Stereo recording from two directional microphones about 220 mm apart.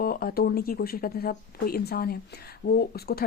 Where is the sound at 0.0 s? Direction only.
40° left (ahead or behind).